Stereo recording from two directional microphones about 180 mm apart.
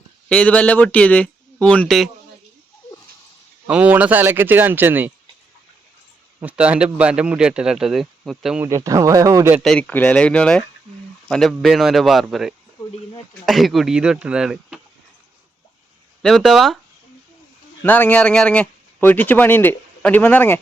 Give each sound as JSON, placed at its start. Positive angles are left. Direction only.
{"t": 0.3, "sound": "speech", "side_deg": 5}
{"t": 3.7, "sound": "speech", "side_deg": -5}
{"t": 6.4, "sound": "speech", "side_deg": -10}
{"t": 8.6, "sound": "speech", "side_deg": -15}
{"t": 9.6, "sound": "speech", "side_deg": 5}
{"t": 16.2, "sound": "speech", "side_deg": 0}
{"t": 17.8, "sound": "speech", "side_deg": 10}